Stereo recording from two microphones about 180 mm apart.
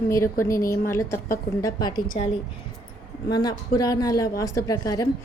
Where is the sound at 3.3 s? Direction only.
25° left (ahead or behind).